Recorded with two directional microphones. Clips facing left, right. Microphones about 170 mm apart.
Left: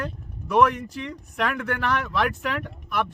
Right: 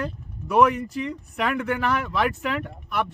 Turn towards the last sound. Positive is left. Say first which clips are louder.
# even
turn(degrees=-5)  # may be behind; listen again after turning